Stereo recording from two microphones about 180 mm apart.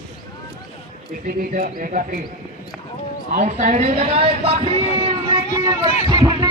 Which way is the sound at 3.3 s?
40° right (ahead or behind).